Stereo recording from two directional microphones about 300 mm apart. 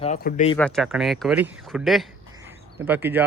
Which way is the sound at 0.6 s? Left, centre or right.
Centre.